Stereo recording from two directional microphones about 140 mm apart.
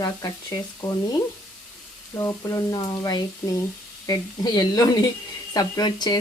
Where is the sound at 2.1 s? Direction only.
25° left (ahead or behind).